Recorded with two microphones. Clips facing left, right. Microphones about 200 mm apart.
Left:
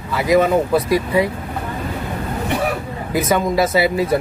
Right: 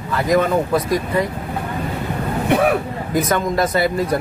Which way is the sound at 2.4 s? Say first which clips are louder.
Right 5 dB; 55° right (ahead or behind).